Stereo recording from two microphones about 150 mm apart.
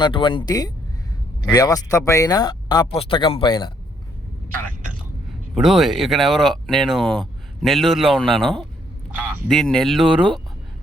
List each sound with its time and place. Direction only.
0.0 s speech: 35° left (ahead or behind)
5.5 s speech: centre (ahead or behind)